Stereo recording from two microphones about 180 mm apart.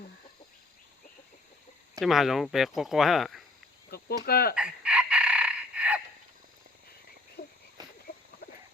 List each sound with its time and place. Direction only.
2.0 s speech: centre (ahead or behind)
3.9 s cricket: 60° left (ahead or behind)
4.3 s speech: 60° left (ahead or behind)
4.5 s chicken: 5° right (ahead or behind)
7.4 s frog: 60° left (ahead or behind)